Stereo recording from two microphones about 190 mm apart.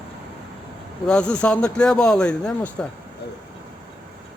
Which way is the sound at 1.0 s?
5° left (ahead or behind).